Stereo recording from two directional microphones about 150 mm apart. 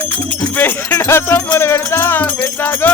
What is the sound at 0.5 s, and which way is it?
Music, 15° left (ahead or behind).